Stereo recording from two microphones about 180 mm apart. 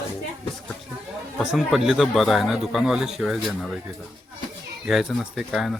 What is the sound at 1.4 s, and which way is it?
A man's voice, centre (ahead or behind).